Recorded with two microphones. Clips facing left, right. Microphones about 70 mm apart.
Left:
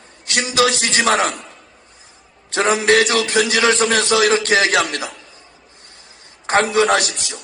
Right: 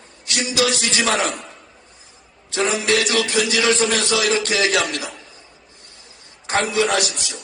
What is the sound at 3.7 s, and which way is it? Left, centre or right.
A man's voice, left.